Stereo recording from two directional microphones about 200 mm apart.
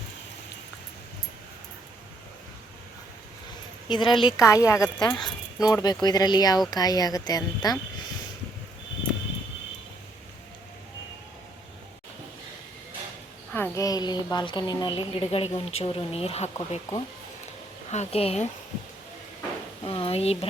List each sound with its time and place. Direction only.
3.8 s speech: 25° left (ahead or behind)
13.5 s speech: 15° left (ahead or behind); by 16.8 s 30° left (ahead or behind)
17.9 s speech: 30° left (ahead or behind)
19.8 s speech: 25° left (ahead or behind)